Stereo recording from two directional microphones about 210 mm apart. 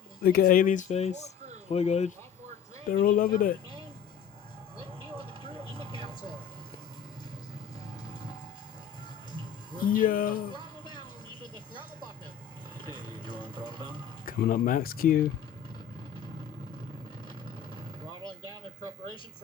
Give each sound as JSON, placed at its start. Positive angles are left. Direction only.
{"t": 0.2, "sound": "speech", "side_deg": 45}
{"t": 2.9, "sound": "speech", "side_deg": 40}
{"t": 9.8, "sound": "speech", "side_deg": 40}
{"t": 14.3, "sound": "speech", "side_deg": 40}